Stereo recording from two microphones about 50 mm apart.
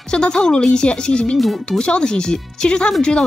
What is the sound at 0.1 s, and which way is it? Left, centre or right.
Speech, centre.